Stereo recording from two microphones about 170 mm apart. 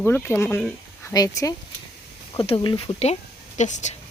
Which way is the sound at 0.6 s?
5° left (ahead or behind).